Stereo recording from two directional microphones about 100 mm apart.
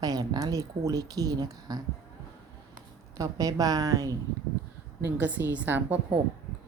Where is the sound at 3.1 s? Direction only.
35° right (ahead or behind).